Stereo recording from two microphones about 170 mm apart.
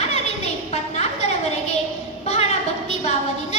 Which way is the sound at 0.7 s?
40° left (ahead or behind).